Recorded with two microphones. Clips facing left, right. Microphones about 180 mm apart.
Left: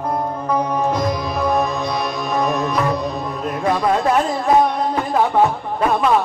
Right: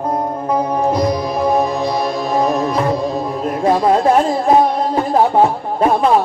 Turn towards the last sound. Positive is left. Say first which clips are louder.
# right 3 dB
turn(degrees=-30)  # may be behind; listen again after turning